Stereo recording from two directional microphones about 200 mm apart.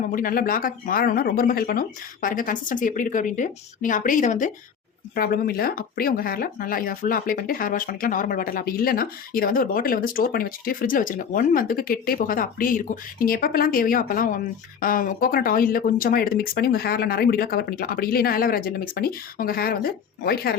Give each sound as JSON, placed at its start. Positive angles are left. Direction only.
{"t": 0.1, "sound": "speech", "side_deg": 45}
{"t": 5.1, "sound": "speech", "side_deg": 50}